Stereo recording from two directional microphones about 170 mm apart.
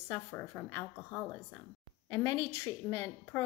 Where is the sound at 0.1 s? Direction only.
10° left (ahead or behind).